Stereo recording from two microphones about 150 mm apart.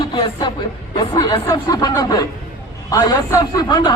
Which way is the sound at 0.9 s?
30° left (ahead or behind).